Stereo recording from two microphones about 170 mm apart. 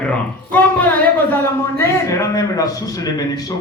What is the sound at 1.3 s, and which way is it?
Speech, 15° left (ahead or behind).